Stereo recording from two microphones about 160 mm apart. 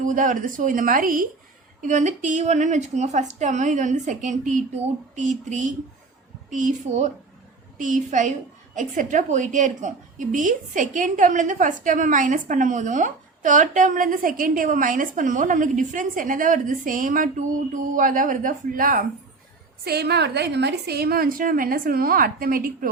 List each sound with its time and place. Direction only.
0.0 s a woman's voice: 55° right (ahead or behind)
6.9 s a woman's voice: 45° right (ahead or behind); by 19.0 s 60° right (ahead or behind)
19.8 s a woman's voice: 85° right; by 22.9 s 65° right (ahead or behind)